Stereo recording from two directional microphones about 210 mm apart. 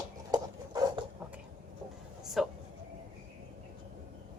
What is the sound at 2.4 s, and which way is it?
Speech, centre (ahead or behind).